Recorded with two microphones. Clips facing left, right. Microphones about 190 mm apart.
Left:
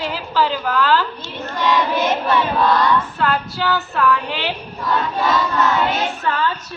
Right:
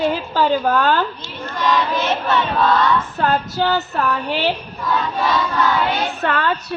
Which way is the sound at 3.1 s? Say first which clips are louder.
Right 2 dB; 45° right (ahead or behind).